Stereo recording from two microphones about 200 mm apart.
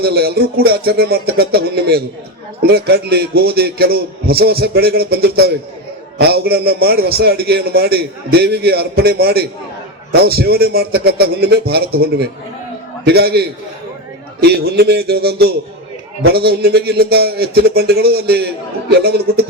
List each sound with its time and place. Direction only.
0.0 s a man's voice: 55° right (ahead or behind)